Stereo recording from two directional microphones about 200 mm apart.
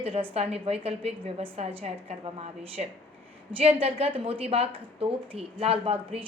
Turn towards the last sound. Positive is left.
turn(degrees=-30)  # may be behind; listen again after turning